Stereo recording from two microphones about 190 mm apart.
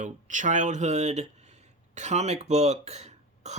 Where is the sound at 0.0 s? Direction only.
40° right (ahead or behind).